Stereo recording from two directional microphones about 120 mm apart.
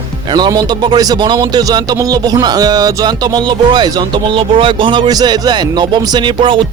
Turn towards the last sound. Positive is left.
turn(degrees=-45)  # may be behind; listen again after turning